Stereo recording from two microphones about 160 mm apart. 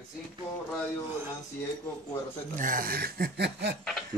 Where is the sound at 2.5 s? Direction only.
55° right (ahead or behind); by 3.7 s 90° right.